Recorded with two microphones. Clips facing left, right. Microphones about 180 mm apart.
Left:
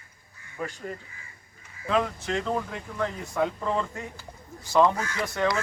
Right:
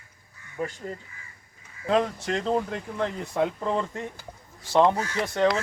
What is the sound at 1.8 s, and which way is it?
Speech, 35° right (ahead or behind).